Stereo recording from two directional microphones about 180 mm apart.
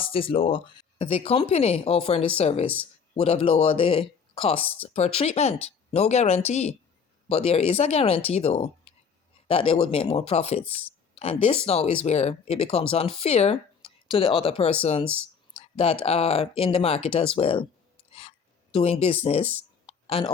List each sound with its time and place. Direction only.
0.0 s speech: 30° left (ahead or behind)
18.1 s a sound: 35° left (ahead or behind)
19.2 s speech: 35° left (ahead or behind)
19.9 s clicking: 30° left (ahead or behind)